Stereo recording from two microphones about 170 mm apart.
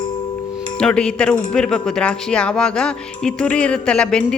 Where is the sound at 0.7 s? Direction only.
5° left (ahead or behind).